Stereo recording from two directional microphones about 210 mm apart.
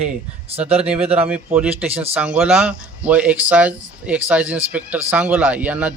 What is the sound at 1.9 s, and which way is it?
Speech, 30° right (ahead or behind).